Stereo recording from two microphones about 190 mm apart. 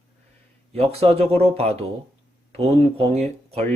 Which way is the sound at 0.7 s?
30° right (ahead or behind).